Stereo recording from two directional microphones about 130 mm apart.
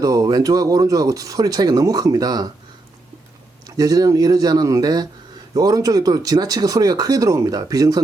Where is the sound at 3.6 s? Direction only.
30° right (ahead or behind).